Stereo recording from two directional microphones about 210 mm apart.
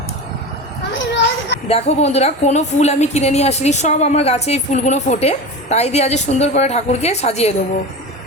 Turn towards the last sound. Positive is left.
turn(degrees=30)  # may be behind; listen again after turning